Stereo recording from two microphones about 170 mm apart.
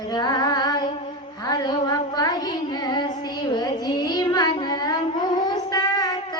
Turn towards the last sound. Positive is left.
turn(degrees=20)  # may be behind; listen again after turning